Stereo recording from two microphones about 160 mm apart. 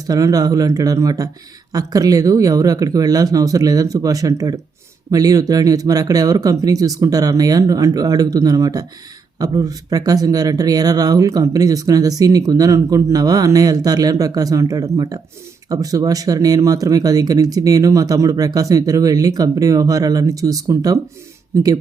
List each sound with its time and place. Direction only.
0.1 s speech: 20° right (ahead or behind)